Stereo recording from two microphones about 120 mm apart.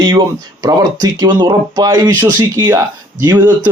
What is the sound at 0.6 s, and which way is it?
Speech, 30° right (ahead or behind).